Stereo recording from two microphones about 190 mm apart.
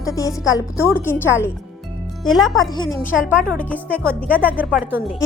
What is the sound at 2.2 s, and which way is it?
Speech, centre (ahead or behind).